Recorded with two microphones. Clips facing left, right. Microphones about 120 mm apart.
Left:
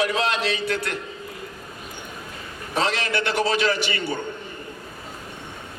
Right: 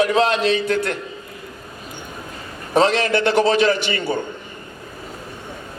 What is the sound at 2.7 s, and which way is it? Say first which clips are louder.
A man's voice: right 8 dB; 35° right (ahead or behind).